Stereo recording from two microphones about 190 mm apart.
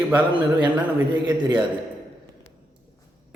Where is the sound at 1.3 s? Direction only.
20° right (ahead or behind).